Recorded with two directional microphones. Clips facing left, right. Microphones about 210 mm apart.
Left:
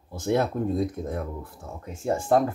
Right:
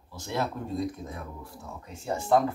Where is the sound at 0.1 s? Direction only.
50° left (ahead or behind).